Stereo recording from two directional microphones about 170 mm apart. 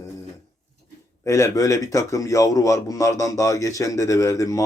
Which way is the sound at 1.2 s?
15° left (ahead or behind).